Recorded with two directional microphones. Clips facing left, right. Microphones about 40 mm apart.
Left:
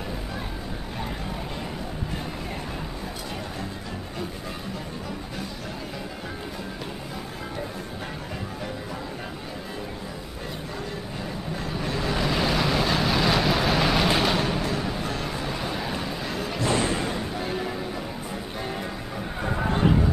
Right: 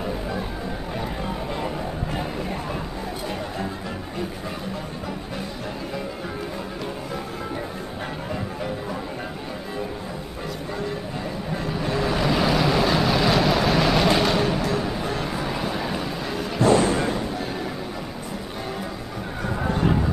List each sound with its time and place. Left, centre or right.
11.7 s vehicle: centre
14.7 s music: centre
15.2 s vehicle: centre
16.5 s thump: right
17.1 s music: centre
19.4 s a sound: centre